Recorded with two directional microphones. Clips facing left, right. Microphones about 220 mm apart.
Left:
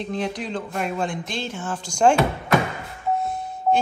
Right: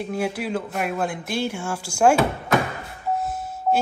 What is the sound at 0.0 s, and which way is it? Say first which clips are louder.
Speech: right 1 dB; 10° right (ahead or behind).